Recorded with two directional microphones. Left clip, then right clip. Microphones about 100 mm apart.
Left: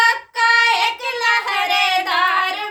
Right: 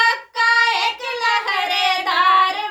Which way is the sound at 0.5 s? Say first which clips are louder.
Left 2 dB; 35° left (ahead or behind).